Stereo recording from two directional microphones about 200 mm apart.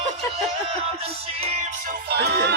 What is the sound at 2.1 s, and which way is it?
Music, 55° right (ahead or behind).